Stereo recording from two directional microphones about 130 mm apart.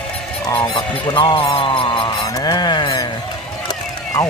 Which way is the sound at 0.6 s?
35° left (ahead or behind).